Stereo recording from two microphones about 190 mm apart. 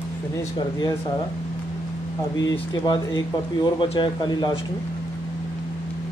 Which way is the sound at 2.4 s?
20° left (ahead or behind).